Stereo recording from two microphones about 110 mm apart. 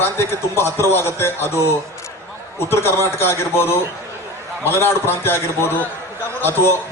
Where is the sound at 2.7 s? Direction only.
20° left (ahead or behind).